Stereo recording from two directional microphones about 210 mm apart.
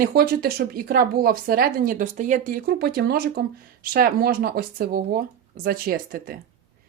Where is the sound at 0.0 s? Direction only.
45° right (ahead or behind).